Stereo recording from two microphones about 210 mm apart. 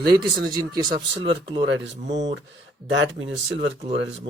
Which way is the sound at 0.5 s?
20° right (ahead or behind).